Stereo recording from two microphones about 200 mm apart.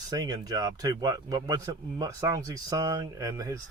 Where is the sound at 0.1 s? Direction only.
20° right (ahead or behind).